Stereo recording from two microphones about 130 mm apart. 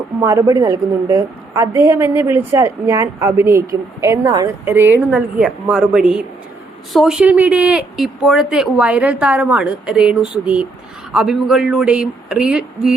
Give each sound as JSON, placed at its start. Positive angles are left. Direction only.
{"t": 0.2, "sound": "a woman's voice", "side_deg": -25}
{"t": 4.6, "sound": "speech", "side_deg": -15}